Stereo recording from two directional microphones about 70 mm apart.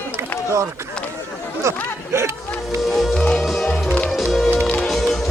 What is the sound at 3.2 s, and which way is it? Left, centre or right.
Music, centre.